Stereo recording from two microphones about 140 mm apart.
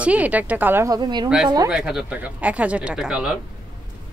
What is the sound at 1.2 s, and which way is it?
A woman's voice, 5° right (ahead or behind).